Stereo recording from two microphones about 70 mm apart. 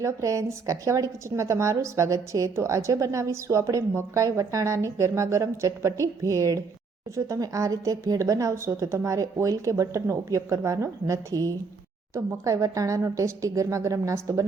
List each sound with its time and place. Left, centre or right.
0.0 s a woman's voice: right
10.6 s a woman's voice: right
12.1 s a woman's voice: right